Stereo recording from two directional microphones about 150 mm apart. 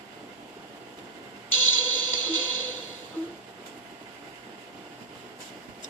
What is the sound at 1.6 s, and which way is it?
Music, 10° left (ahead or behind).